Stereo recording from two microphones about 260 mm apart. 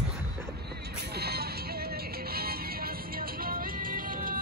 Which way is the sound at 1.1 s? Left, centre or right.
Right.